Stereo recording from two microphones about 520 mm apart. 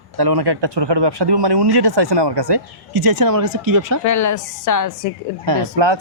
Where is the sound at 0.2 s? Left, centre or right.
Right.